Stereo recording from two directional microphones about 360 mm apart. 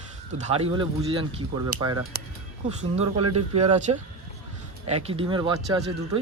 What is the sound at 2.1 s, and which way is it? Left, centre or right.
Speech, right.